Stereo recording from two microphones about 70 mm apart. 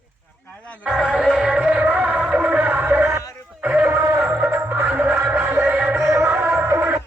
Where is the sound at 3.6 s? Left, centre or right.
Right.